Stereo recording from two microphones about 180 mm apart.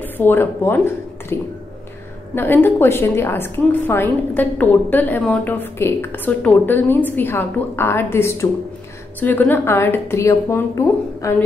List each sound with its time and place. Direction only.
0.0 s a woman's voice: 10° left (ahead or behind)